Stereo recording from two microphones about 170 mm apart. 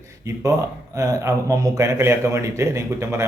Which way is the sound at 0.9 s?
20° right (ahead or behind).